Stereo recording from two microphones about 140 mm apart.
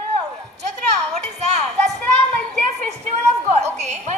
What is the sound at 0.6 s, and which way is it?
A woman's voice, 55° right (ahead or behind).